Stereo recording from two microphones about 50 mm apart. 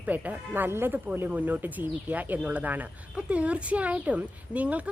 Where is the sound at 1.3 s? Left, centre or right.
Right.